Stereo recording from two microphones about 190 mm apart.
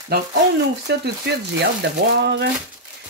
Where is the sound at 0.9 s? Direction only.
60° right (ahead or behind).